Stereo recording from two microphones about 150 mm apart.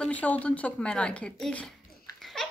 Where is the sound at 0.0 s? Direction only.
10° left (ahead or behind).